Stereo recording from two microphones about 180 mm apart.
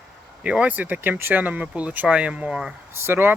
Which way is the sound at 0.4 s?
5° right (ahead or behind).